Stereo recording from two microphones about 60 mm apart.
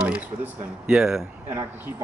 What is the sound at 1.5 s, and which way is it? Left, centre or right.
Speech, right.